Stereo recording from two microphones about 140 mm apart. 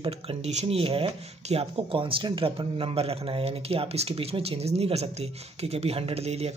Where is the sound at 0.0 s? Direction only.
45° right (ahead or behind).